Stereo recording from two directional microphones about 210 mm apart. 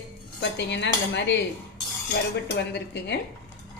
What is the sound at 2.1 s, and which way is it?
Cutlery, 55° left (ahead or behind).